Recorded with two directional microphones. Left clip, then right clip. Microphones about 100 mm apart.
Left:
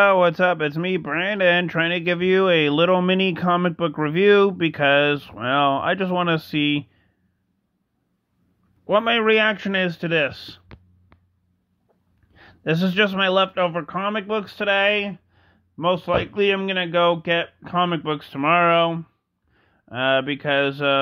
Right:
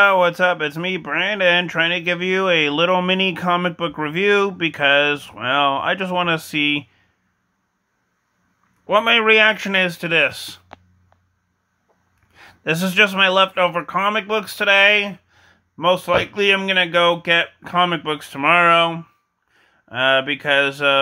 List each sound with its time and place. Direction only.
0.0 s speech: 35° left (ahead or behind)
8.8 s a man's voice: 30° left (ahead or behind)
12.3 s a man's voice: 30° left (ahead or behind)